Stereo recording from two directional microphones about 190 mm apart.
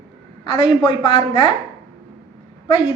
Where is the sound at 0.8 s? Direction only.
30° left (ahead or behind).